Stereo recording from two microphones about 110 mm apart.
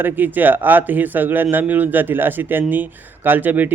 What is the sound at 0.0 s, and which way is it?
A man's voice, 15° right (ahead or behind).